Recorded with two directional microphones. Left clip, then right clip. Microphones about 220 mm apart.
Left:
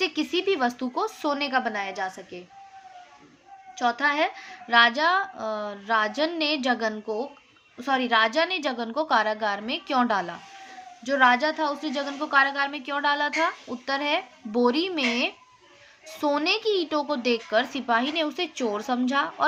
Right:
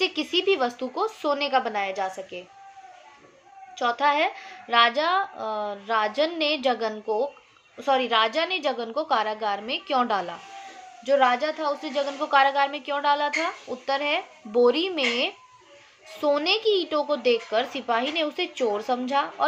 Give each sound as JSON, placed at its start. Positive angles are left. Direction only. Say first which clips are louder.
{"t": 0.0, "sound": "a woman's voice", "louder": "right 2 dB", "side_deg": 20}
{"t": 3.8, "sound": "a woman's voice", "louder": "right 1 dB", "side_deg": 20}